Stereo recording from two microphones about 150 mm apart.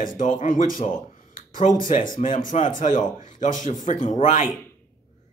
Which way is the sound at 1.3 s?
60° left (ahead or behind).